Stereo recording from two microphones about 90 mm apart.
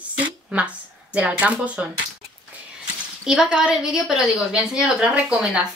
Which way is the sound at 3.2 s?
5° right (ahead or behind).